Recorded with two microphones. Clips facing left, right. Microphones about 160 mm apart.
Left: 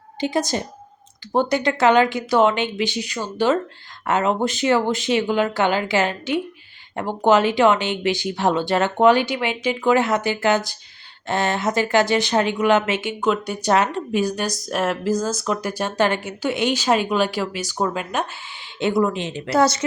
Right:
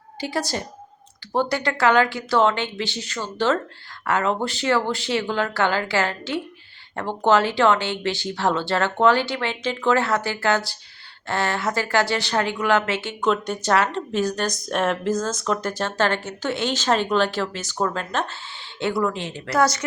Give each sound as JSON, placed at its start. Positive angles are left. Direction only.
{"t": 0.2, "sound": "a woman's voice", "side_deg": 20}